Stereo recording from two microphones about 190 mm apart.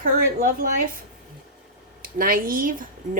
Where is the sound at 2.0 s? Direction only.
50° right (ahead or behind).